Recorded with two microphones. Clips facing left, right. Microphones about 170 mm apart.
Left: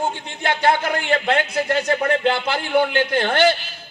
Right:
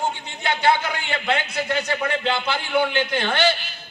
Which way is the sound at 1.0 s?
50° left (ahead or behind).